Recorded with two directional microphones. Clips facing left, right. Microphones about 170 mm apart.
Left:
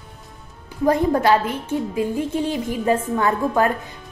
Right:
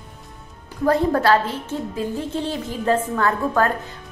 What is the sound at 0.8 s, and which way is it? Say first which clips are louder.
A woman's voice: left 1 dB; 15° left (ahead or behind).